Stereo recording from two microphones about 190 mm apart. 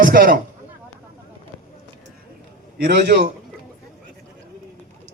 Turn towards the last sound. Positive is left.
turn(degrees=-60)  # may be behind; listen again after turning